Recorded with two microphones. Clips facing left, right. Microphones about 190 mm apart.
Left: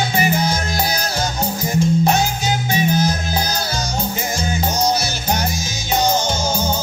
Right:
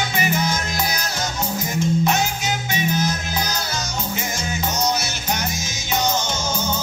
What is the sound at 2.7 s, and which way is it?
Music, 35° left (ahead or behind).